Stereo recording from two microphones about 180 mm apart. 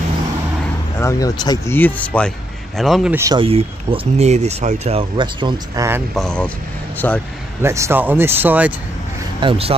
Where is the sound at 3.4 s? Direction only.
30° right (ahead or behind).